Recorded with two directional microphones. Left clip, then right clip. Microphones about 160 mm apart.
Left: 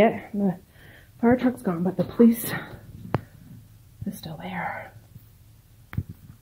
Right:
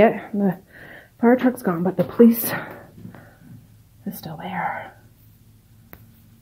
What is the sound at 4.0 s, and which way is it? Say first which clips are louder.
Speech: right 4 dB; centre (ahead or behind).